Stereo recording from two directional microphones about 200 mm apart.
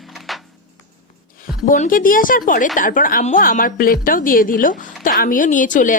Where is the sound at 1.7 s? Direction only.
40° left (ahead or behind).